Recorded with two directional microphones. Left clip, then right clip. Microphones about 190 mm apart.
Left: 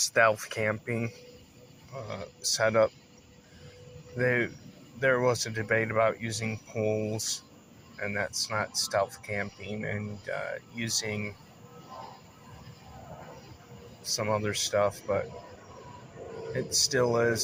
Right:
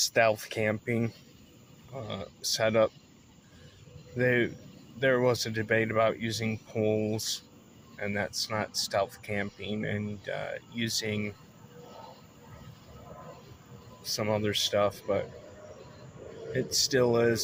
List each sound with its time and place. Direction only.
0.0 s speech: 35° right (ahead or behind)
4.2 s speech: 40° right (ahead or behind)
14.0 s speech: 45° right (ahead or behind)
16.5 s speech: 40° right (ahead or behind)